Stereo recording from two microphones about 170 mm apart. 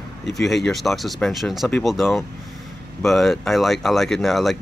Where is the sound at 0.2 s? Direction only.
Centre (ahead or behind).